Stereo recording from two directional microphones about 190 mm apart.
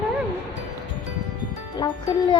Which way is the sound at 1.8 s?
20° left (ahead or behind).